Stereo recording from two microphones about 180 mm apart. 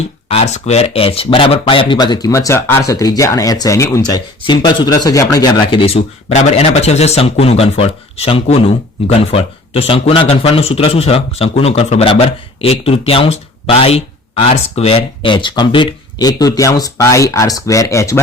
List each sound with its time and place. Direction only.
0.3 s a man's voice: 40° left (ahead or behind); by 18.2 s 15° left (ahead or behind)